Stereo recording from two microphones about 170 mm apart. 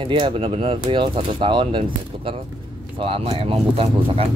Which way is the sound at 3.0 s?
35° right (ahead or behind).